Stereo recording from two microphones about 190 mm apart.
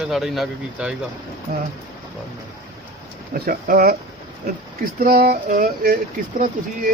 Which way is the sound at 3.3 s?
50° right (ahead or behind).